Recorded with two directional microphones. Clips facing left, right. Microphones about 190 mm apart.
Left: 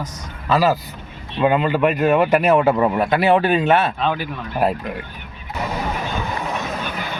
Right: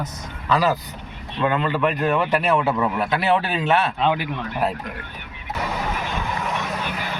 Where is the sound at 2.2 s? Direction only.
45° left (ahead or behind).